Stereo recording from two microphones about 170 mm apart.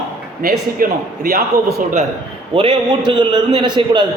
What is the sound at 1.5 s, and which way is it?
Speech, 20° right (ahead or behind).